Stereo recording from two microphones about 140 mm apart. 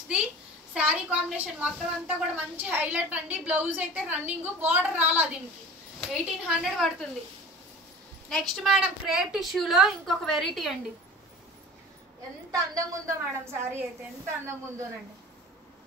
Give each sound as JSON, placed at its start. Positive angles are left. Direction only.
{"t": 0.7, "sound": "a woman's voice", "side_deg": -10}
{"t": 8.3, "sound": "a woman's voice", "side_deg": 0}
{"t": 12.4, "sound": "a woman's voice", "side_deg": -25}